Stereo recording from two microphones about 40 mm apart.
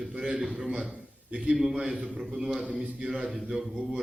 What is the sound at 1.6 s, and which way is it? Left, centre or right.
A man's voice, centre.